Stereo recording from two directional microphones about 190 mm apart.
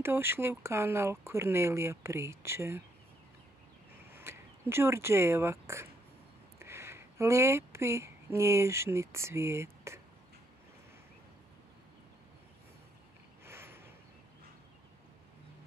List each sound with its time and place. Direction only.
0.0 s speech: 10° right (ahead or behind)
4.1 s speech: 15° right (ahead or behind)
13.5 s a sound: 10° right (ahead or behind)